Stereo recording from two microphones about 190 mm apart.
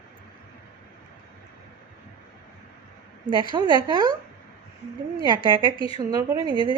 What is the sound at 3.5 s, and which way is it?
Speech, 25° right (ahead or behind).